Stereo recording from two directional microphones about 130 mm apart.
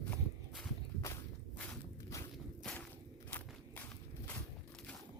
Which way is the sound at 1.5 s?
10° left (ahead or behind).